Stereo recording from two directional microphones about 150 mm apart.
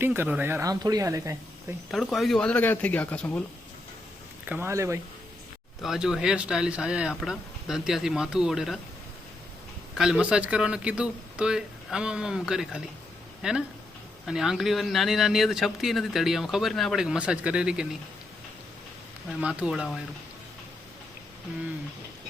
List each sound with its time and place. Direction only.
0.0 s speech: 15° right (ahead or behind)
1.9 s speech: centre (ahead or behind)
4.4 s speech: 15° right (ahead or behind)
5.8 s speech: 5° right (ahead or behind)
9.9 s speech: 5° right (ahead or behind)
19.3 s speech: 5° right (ahead or behind)